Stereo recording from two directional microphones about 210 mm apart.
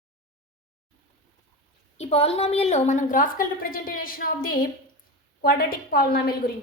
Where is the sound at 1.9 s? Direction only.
30° left (ahead or behind); by 6.3 s 45° left (ahead or behind).